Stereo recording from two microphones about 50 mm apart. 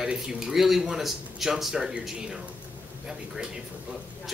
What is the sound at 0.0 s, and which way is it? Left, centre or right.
Speech, centre.